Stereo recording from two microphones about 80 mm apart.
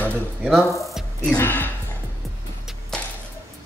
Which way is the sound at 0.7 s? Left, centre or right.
Centre.